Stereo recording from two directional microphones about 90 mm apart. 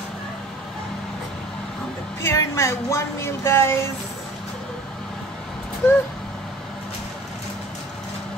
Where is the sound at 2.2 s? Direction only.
30° left (ahead or behind).